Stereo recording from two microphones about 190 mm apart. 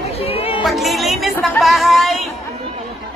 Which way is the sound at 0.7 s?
Centre (ahead or behind).